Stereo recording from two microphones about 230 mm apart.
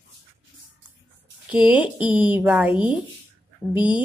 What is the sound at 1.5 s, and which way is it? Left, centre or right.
A woman's voice, centre.